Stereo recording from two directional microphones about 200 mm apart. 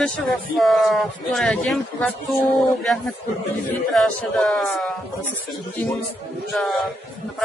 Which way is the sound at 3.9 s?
Centre (ahead or behind).